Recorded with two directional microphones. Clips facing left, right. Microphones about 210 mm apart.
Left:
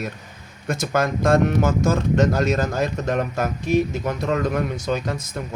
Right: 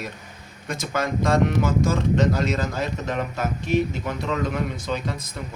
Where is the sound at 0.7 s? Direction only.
45° left (ahead or behind).